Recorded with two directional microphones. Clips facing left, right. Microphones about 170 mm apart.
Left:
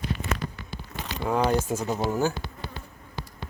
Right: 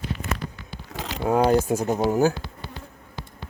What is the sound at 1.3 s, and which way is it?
Speech, 35° right (ahead or behind).